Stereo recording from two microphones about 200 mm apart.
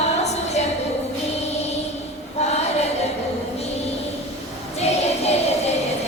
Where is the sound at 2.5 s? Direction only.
30° left (ahead or behind).